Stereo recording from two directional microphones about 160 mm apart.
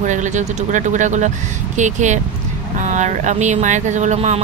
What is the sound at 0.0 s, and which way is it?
Speech, 50° right (ahead or behind).